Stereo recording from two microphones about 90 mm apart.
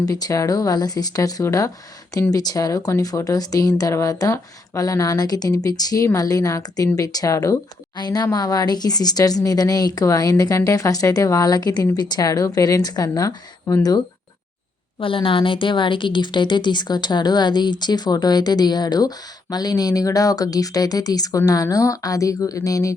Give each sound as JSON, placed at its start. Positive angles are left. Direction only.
{"t": 0.0, "sound": "a woman's voice", "side_deg": 45}
{"t": 14.9, "sound": "a woman's voice", "side_deg": 80}